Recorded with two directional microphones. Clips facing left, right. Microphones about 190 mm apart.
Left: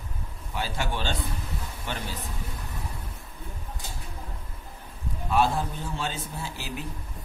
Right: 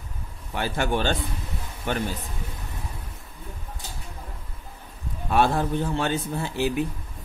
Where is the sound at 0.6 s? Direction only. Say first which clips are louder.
Right 6 dB; 55° right (ahead or behind).